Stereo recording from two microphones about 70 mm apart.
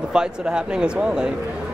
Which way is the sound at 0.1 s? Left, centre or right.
Centre.